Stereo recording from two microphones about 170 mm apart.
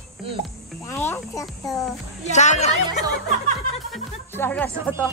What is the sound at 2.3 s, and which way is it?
Music, 45° left (ahead or behind).